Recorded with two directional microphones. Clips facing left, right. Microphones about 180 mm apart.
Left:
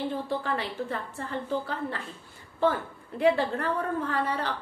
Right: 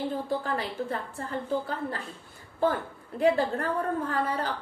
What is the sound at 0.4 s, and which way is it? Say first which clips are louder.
A woman's voice: even; 40° right (ahead or behind).